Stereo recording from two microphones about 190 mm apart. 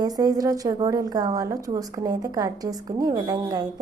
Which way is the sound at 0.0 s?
20° right (ahead or behind).